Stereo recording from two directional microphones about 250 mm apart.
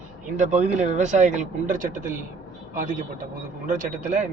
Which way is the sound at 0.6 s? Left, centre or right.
Right.